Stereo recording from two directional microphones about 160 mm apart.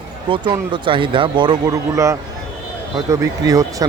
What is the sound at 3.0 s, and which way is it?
Speech, 20° right (ahead or behind).